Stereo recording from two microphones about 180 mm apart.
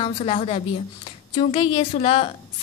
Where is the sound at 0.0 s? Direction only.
35° left (ahead or behind).